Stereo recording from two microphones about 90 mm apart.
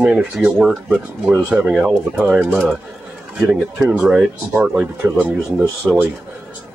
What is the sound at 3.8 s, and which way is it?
Speech, 15° right (ahead or behind).